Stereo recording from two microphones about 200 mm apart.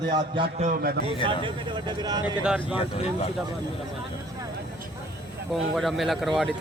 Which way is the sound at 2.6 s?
25° left (ahead or behind).